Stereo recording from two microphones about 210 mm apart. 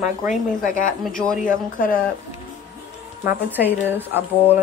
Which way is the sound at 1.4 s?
40° left (ahead or behind).